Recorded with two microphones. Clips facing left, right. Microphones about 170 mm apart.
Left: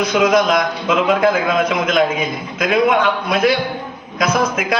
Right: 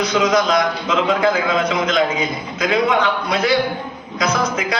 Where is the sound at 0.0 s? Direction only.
50° left (ahead or behind).